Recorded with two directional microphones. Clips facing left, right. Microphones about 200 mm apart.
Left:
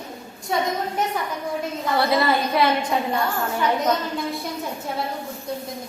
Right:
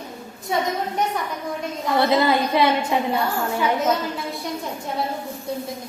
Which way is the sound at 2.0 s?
20° right (ahead or behind).